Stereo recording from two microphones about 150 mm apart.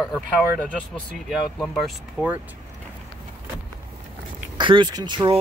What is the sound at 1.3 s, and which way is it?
Speech, centre (ahead or behind).